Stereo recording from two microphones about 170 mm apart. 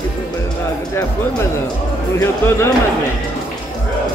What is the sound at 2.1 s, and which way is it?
Speech, 15° left (ahead or behind).